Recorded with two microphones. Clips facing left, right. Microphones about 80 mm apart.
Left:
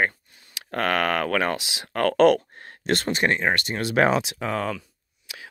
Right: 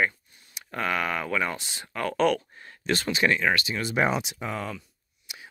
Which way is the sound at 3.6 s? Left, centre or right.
Left.